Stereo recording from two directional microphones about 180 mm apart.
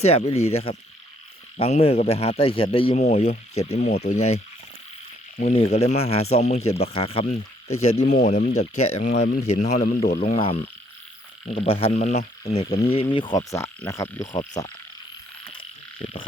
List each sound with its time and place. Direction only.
0.0 s speech: 35° left (ahead or behind)
5.5 s speech: 35° left (ahead or behind)
10.1 s speech: 60° left (ahead or behind)
11.4 s speech: 30° left (ahead or behind)